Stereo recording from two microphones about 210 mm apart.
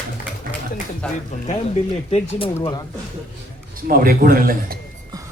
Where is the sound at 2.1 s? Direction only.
25° left (ahead or behind).